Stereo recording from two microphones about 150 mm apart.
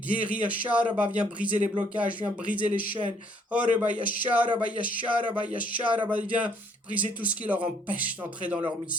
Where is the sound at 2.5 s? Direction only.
65° left (ahead or behind).